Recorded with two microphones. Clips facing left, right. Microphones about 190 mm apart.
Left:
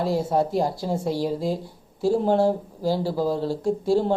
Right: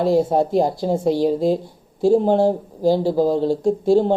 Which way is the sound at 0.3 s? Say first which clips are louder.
Right 5 dB; 20° right (ahead or behind).